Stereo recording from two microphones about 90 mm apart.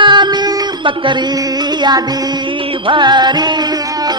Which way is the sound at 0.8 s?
65° right (ahead or behind).